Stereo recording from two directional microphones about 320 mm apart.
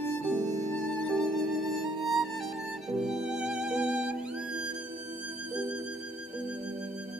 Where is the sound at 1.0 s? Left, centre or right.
Centre.